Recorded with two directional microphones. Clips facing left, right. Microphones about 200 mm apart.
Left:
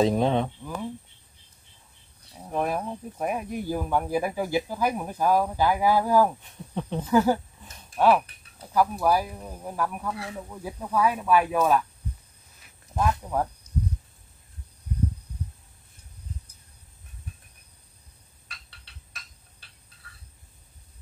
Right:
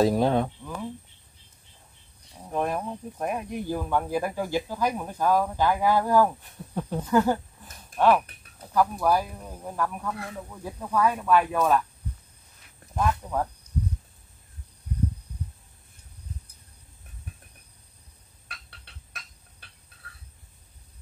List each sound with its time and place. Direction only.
0.0 s speech: 5° right (ahead or behind)
2.3 s speech: 5° left (ahead or behind)
12.9 s speech: 5° left (ahead or behind)
18.5 s fowl: 55° right (ahead or behind)